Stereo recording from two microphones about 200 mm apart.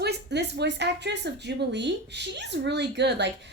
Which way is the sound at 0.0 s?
55° right (ahead or behind).